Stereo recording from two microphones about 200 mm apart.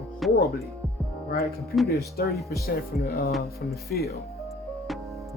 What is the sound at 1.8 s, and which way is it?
Speech, 50° left (ahead or behind).